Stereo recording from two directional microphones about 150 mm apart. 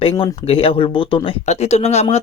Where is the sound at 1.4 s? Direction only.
50° left (ahead or behind).